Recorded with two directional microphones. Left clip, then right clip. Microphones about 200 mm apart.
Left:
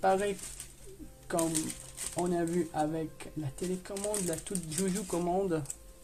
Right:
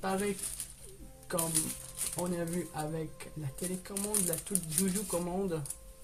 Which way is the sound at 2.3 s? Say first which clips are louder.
Left 6 dB; 50° left (ahead or behind).